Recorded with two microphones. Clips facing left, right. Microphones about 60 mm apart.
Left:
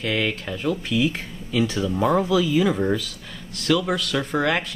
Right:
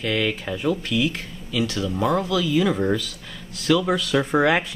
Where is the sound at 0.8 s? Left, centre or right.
Centre.